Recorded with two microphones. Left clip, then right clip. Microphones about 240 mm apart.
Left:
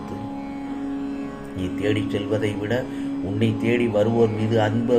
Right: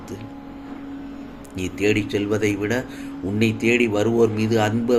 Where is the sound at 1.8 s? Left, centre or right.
Right.